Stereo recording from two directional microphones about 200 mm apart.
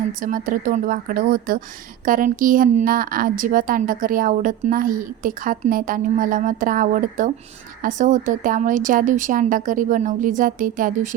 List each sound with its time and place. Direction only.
0.1 s a woman's voice: 40° right (ahead or behind)